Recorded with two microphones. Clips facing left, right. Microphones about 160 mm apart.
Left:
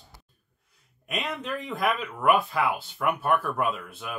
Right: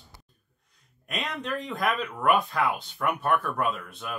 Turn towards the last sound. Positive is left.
turn(degrees=5)  # may be behind; listen again after turning